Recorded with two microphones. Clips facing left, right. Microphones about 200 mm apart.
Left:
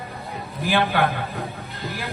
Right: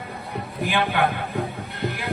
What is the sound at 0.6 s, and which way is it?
Speech, 35° left (ahead or behind).